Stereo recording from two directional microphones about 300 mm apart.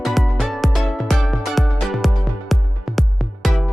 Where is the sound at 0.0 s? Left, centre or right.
Centre.